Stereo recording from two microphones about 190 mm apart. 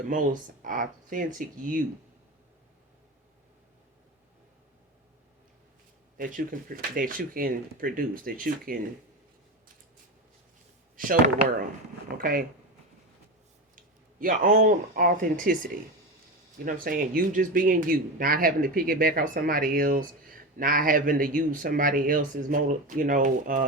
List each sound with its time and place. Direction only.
0.1 s speech: 45° right (ahead or behind)
6.1 s speech: 45° right (ahead or behind)
10.9 s speech: 45° right (ahead or behind)
13.7 s speech: 45° right (ahead or behind)